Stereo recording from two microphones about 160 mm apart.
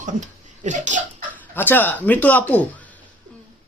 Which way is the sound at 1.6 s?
10° left (ahead or behind).